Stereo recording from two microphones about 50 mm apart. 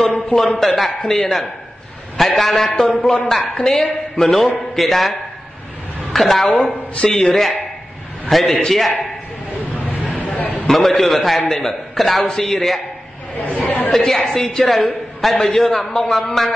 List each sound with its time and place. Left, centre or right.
0.4 s a man's voice: centre
6.1 s a man's voice: centre
10.4 s a sound: left
10.7 s a man's voice: centre
13.8 s a woman's voice: centre